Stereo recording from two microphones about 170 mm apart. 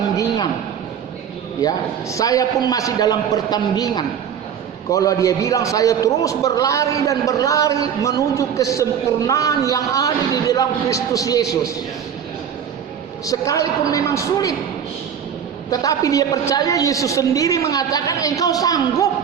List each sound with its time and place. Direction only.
1.6 s a man's voice: 20° left (ahead or behind)
13.2 s a man's voice: 20° left (ahead or behind)
15.7 s a man's voice: 20° left (ahead or behind)